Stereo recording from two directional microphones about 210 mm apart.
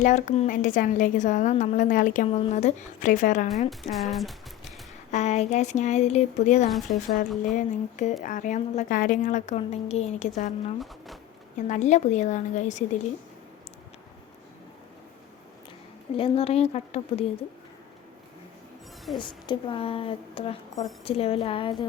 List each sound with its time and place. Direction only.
0.0 s a woman's voice: 35° left (ahead or behind)
3.9 s speech: centre (ahead or behind)
5.1 s a woman's voice: 30° left (ahead or behind)
10.8 s speech: centre (ahead or behind)
11.5 s a woman's voice: 35° left (ahead or behind)
16.1 s a woman's voice: 25° left (ahead or behind)
19.1 s a woman's voice: 25° left (ahead or behind)